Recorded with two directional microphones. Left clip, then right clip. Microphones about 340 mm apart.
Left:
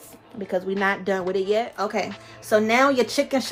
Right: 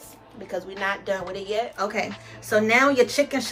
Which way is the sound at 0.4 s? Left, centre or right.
Left.